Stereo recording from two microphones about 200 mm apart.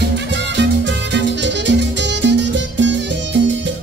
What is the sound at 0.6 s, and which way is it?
Music, 60° right (ahead or behind).